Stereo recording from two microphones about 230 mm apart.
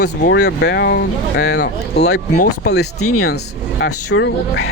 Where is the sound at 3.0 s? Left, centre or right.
Left.